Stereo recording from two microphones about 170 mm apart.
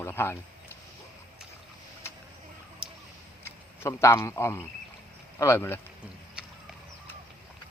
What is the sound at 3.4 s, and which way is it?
Speech, 15° left (ahead or behind).